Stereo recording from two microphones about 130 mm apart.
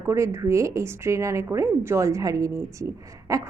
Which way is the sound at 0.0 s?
20° right (ahead or behind).